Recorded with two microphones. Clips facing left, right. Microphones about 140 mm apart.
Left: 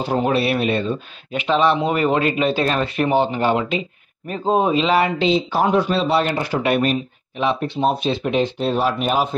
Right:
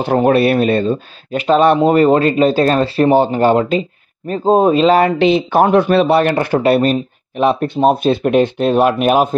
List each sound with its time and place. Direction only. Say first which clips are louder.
0.0 s speech: right 7 dB; 60° right (ahead or behind)
5.2 s speech: right 6 dB; 60° right (ahead or behind)
6.6 s speech: right 4 dB; 35° right (ahead or behind); by 9.3 s 60° right (ahead or behind)